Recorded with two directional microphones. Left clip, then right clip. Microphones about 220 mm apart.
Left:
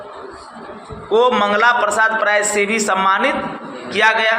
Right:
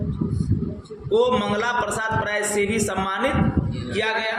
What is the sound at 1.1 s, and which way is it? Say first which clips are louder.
A man's voice: left 6 dB; 10° right (ahead or behind).